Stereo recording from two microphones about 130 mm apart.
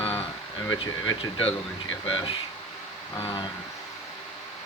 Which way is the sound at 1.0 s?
40° left (ahead or behind).